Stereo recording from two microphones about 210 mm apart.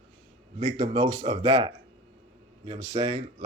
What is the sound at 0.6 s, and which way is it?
Speech, 30° right (ahead or behind).